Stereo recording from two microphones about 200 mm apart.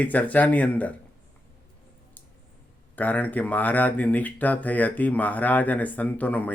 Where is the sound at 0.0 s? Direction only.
10° left (ahead or behind).